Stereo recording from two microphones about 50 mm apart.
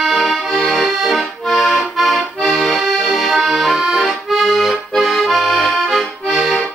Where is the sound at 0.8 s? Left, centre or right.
Centre.